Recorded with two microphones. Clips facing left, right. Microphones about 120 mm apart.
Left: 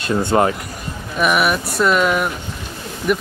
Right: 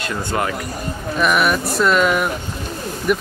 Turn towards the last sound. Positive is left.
turn(degrees=0)  # may be behind; listen again after turning